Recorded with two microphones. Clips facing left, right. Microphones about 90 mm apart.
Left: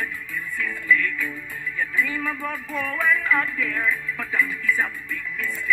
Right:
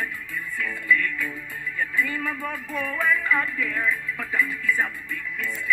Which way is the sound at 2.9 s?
15° right (ahead or behind).